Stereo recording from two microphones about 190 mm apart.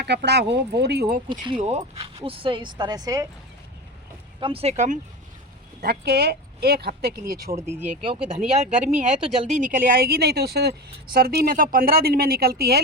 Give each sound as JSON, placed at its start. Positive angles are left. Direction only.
{"t": 0.0, "sound": "speech", "side_deg": -60}
{"t": 1.3, "sound": "speech", "side_deg": -25}
{"t": 4.4, "sound": "speech", "side_deg": -30}
{"t": 5.8, "sound": "speech", "side_deg": -55}
{"t": 7.9, "sound": "speech", "side_deg": -30}